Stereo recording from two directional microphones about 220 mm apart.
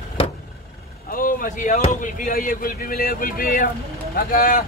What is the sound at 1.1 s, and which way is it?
Speech, 40° left (ahead or behind).